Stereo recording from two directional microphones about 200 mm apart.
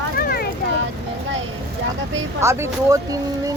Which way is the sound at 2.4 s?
15° right (ahead or behind).